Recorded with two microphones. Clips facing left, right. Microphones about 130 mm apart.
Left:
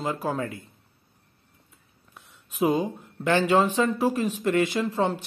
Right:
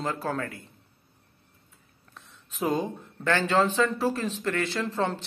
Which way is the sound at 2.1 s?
15° left (ahead or behind).